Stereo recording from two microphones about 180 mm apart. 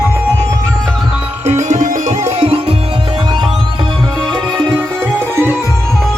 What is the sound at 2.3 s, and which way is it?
Music, 30° right (ahead or behind).